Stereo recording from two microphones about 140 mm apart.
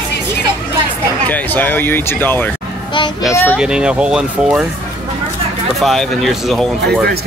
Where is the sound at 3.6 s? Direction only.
5° right (ahead or behind).